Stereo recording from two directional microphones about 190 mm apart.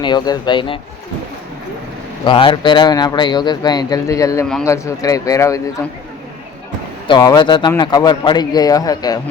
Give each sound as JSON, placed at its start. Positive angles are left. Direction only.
{"t": 0.0, "sound": "a man's voice", "side_deg": 25}
{"t": 2.2, "sound": "a man's voice", "side_deg": 25}
{"t": 7.1, "sound": "a man's voice", "side_deg": 25}